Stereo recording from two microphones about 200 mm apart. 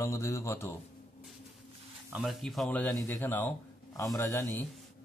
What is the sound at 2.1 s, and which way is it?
A man's voice, centre (ahead or behind).